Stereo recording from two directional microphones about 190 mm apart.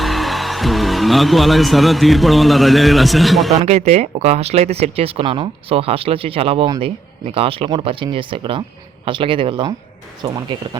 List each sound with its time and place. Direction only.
0.0 s speech: centre (ahead or behind)
3.6 s speech: 35° right (ahead or behind)